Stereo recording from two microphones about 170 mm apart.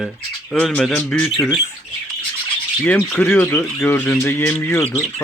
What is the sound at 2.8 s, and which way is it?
Speech, 5° left (ahead or behind).